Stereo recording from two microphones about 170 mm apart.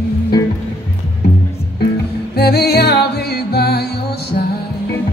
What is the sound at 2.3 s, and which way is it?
Music, 70° left (ahead or behind).